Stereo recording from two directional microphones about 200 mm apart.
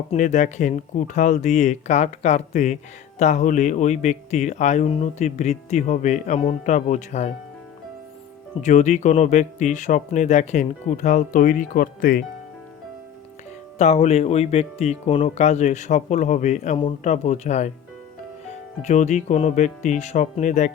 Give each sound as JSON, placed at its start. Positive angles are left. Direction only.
{"t": 0.1, "sound": "speech", "side_deg": 40}
{"t": 8.6, "sound": "speech", "side_deg": 35}
{"t": 13.7, "sound": "speech", "side_deg": 35}
{"t": 18.8, "sound": "speech", "side_deg": 35}